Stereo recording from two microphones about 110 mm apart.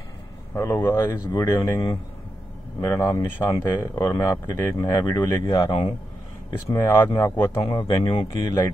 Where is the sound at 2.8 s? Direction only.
30° left (ahead or behind).